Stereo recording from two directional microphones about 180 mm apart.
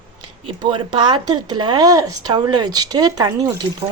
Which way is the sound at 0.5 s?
25° right (ahead or behind).